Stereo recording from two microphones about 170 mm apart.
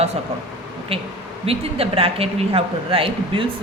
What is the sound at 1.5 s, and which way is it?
A woman's voice, 35° right (ahead or behind).